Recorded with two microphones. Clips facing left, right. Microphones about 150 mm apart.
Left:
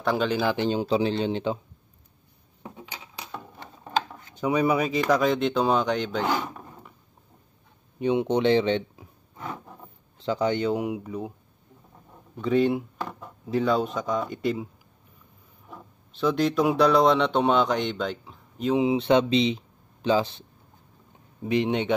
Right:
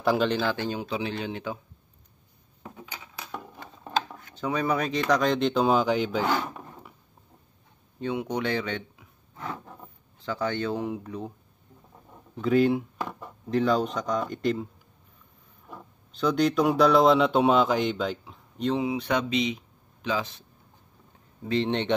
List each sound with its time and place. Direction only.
0.0 s speech: centre (ahead or behind)
0.4 s speech: 15° left (ahead or behind)
0.7 s speech: 35° left (ahead or behind)
2.6 s coin: 20° left (ahead or behind)
4.4 s speech: 15° left (ahead or behind); by 6.2 s 5° right (ahead or behind)
6.2 s speech: 15° left (ahead or behind)
8.0 s speech: 25° left (ahead or behind)
9.4 s a sound: 10° left (ahead or behind)
10.1 s speech: 20° left (ahead or behind)
12.4 s speech: centre (ahead or behind)
15.7 s speech: centre (ahead or behind)
18.7 s speech: 20° left (ahead or behind)
21.5 s speech: 15° left (ahead or behind)